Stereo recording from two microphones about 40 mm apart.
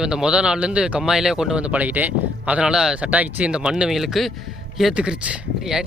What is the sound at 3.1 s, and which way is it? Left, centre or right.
Speech, right.